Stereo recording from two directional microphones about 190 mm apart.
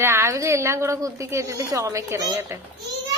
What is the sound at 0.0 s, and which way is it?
A woman's voice, 15° right (ahead or behind).